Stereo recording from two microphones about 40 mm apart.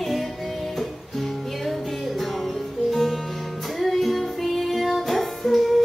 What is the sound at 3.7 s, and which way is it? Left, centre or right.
Music, centre.